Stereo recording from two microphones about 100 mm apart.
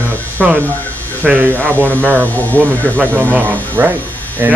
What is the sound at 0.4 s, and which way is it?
Speech, 5° right (ahead or behind).